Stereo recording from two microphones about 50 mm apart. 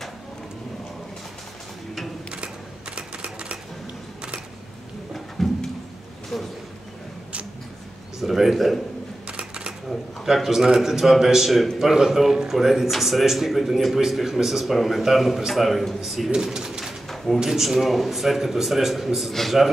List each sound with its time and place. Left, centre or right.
5.1 s a sound: centre
8.2 s speech: centre
9.8 s a man's voice: centre